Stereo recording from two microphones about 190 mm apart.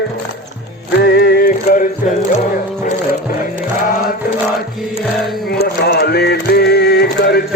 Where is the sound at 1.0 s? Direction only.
55° left (ahead or behind).